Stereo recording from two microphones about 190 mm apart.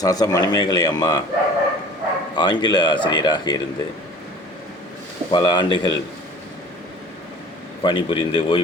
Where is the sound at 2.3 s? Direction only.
20° left (ahead or behind).